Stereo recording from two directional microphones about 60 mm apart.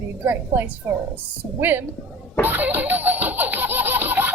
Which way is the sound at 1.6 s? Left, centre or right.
Right.